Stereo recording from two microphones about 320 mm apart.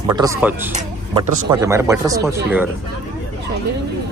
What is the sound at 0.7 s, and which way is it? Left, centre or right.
Speech, right.